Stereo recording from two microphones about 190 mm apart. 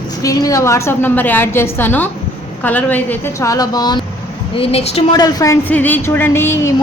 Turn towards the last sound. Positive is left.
turn(degrees=15)  # may be behind; listen again after turning